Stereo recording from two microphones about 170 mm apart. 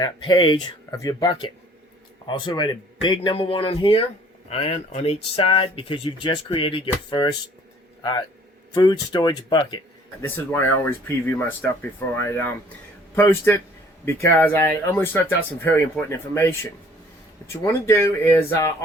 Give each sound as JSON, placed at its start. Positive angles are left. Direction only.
{"t": 0.0, "sound": "speech", "side_deg": 25}
{"t": 8.7, "sound": "a man's voice", "side_deg": 25}
{"t": 10.2, "sound": "speech", "side_deg": 15}
{"t": 17.7, "sound": "speech", "side_deg": 15}